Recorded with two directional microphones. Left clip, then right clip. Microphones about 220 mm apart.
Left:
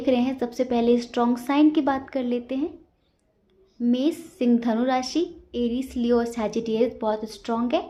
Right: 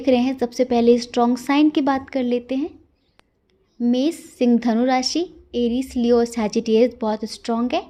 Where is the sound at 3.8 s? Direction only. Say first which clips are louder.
Right 3 dB; 35° right (ahead or behind).